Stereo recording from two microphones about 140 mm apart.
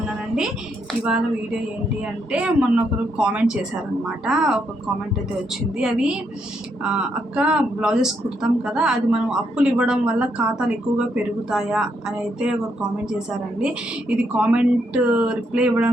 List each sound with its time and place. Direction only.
2.0 s a woman's voice: 10° right (ahead or behind)
5.7 s a woman's voice: 5° right (ahead or behind)